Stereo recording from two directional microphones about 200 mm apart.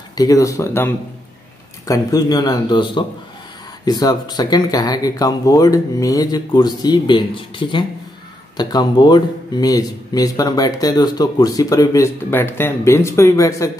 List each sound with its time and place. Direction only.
0.1 s speech: 20° left (ahead or behind)